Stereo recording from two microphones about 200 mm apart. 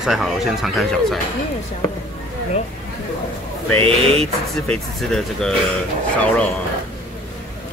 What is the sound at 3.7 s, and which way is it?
Speech, 30° right (ahead or behind).